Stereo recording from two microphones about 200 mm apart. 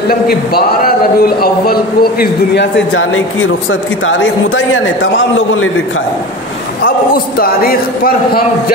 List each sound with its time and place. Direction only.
0.1 s a man's voice: 50° left (ahead or behind); by 5.7 s 75° left (ahead or behind)
7.3 s speech: 45° left (ahead or behind)